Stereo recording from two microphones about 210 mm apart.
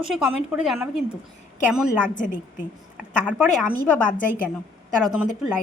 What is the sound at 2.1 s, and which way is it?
Speech, 40° left (ahead or behind).